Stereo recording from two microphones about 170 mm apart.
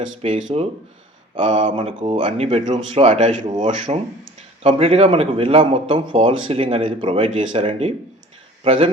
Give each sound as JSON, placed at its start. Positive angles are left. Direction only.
{"t": 0.2, "sound": "a man's voice", "side_deg": -35}
{"t": 1.5, "sound": "a man's voice", "side_deg": -30}
{"t": 3.1, "sound": "a man's voice", "side_deg": -45}